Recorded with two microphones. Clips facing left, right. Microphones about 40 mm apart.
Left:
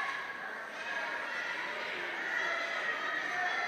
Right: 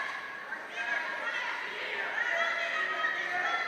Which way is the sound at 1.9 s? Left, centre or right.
Right.